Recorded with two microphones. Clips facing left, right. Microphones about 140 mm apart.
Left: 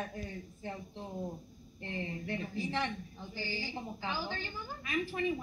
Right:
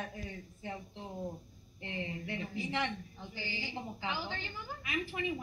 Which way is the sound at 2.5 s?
15° right (ahead or behind).